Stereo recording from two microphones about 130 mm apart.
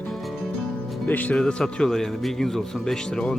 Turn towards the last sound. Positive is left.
turn(degrees=5)  # may be behind; listen again after turning